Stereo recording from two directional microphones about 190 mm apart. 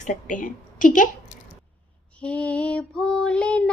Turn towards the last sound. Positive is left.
turn(degrees=5)  # may be behind; listen again after turning